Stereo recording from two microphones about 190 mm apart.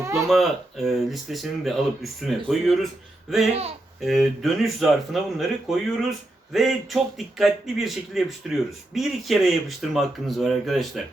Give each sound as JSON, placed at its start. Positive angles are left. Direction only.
{"t": 0.0, "sound": "a sound", "side_deg": -15}
{"t": 0.3, "sound": "speech", "side_deg": 0}
{"t": 4.0, "sound": "speech", "side_deg": 0}